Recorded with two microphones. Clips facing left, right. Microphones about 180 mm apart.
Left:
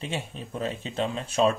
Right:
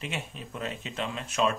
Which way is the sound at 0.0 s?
30° left (ahead or behind).